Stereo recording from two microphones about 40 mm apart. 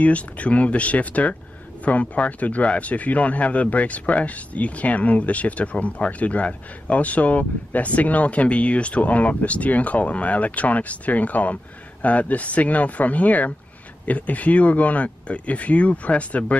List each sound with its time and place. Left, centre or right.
0.0 s speech: left